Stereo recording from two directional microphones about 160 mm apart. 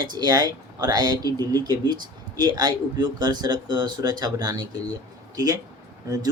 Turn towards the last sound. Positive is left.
turn(degrees=-20)  # may be behind; listen again after turning